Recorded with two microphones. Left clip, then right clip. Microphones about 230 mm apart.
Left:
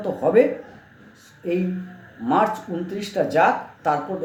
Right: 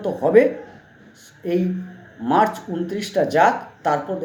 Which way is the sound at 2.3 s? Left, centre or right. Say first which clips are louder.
Right 2 dB; centre.